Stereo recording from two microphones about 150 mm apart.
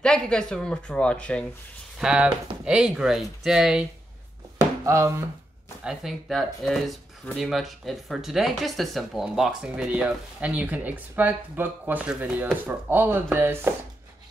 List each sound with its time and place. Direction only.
0.0 s speech: 5° left (ahead or behind)
2.0 s speech: 5° right (ahead or behind)
4.8 s chopping: 20° right (ahead or behind)
5.9 s speech: centre (ahead or behind)